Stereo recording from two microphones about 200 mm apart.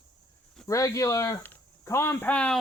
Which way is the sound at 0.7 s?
15° left (ahead or behind).